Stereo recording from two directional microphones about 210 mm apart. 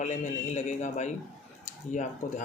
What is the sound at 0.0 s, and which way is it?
Speech, 35° left (ahead or behind).